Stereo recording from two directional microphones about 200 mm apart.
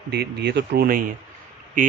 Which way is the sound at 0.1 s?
55° right (ahead or behind).